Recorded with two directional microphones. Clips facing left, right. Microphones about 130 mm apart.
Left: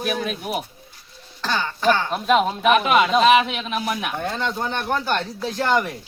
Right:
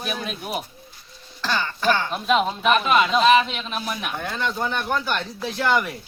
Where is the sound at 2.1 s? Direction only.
45° left (ahead or behind).